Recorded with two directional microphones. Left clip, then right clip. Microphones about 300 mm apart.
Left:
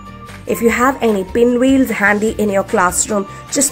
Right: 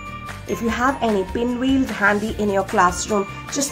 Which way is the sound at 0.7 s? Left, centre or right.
Centre.